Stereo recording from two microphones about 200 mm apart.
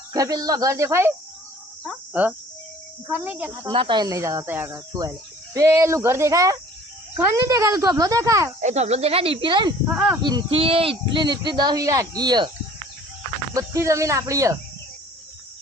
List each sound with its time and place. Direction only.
0.1 s speech: 20° right (ahead or behind)
3.1 s speech: 5° right (ahead or behind)
3.7 s speech: 25° right (ahead or behind)
8.6 s speech: 35° right (ahead or behind)
9.9 s speech: centre (ahead or behind)
10.2 s speech: 25° right (ahead or behind)
13.5 s speech: 15° right (ahead or behind)